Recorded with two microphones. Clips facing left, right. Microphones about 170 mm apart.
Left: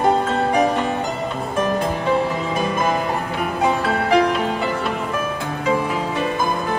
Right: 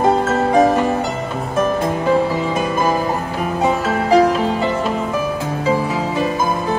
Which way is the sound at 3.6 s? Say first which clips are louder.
Right 2 dB; 30° right (ahead or behind).